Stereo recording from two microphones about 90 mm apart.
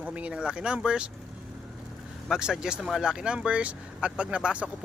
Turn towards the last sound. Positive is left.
turn(degrees=-10)  # may be behind; listen again after turning